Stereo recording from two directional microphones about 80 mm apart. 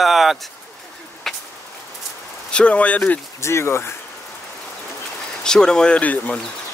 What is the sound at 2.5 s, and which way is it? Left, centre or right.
Speech, centre.